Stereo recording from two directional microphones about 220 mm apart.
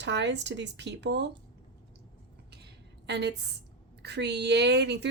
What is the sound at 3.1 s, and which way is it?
Speech, 50° right (ahead or behind).